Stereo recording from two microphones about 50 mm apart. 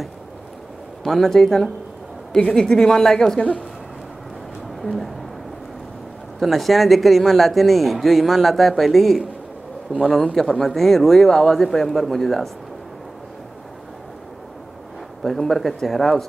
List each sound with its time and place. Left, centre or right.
1.0 s a woman's voice: centre
3.3 s speech: left
4.8 s speech: centre
6.4 s speech: centre
9.9 s a man's voice: right
10.3 s speech: centre
15.2 s speech: centre